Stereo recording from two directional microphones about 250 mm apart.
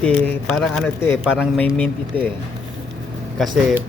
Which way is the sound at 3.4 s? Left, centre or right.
Centre.